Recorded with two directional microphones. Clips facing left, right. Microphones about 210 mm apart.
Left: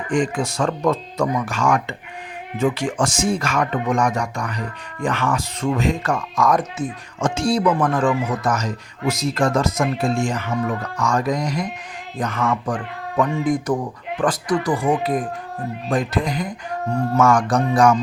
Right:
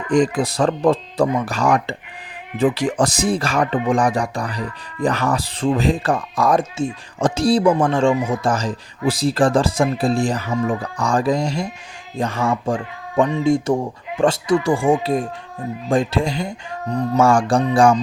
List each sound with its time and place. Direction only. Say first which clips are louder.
0.1 s speech: right 4 dB; 35° right (ahead or behind)